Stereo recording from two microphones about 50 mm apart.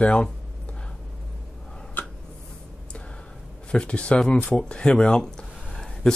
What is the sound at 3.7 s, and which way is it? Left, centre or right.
Speech, left.